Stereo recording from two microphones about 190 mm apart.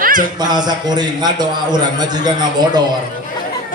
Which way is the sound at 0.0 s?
45° right (ahead or behind).